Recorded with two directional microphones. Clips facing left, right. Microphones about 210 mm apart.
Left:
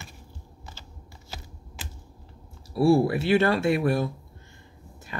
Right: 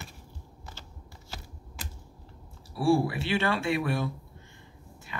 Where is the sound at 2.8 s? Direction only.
40° left (ahead or behind).